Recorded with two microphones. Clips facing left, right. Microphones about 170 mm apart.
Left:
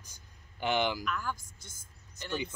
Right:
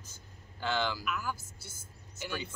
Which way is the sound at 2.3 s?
20° left (ahead or behind).